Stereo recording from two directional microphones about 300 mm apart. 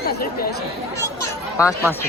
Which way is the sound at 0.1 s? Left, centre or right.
Left.